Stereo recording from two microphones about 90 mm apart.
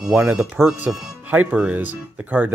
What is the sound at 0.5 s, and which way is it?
Speech, 25° right (ahead or behind).